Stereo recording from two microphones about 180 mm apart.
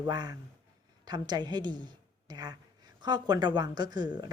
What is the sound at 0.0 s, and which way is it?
A woman's voice, 20° right (ahead or behind).